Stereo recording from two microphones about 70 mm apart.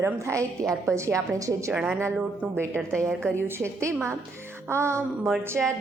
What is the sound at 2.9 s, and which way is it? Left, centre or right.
Speech, centre.